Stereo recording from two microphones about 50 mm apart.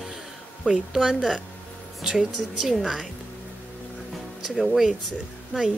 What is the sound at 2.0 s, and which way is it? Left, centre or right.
A woman's voice, centre.